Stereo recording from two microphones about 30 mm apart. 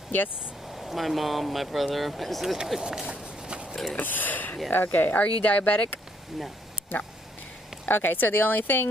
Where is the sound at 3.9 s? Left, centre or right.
Left.